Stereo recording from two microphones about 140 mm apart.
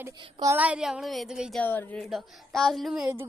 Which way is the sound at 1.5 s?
15° left (ahead or behind).